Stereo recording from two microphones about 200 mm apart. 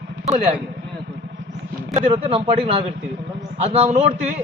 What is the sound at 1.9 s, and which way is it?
A man's voice, 30° right (ahead or behind).